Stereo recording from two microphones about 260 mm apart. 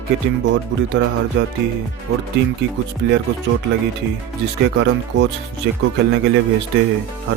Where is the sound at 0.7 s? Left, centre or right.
Right.